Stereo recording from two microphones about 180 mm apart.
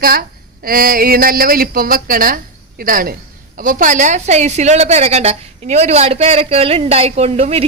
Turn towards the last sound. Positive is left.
turn(degrees=-35)  # may be behind; listen again after turning